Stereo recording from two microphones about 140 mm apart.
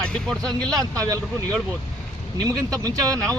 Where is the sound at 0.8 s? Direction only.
25° right (ahead or behind).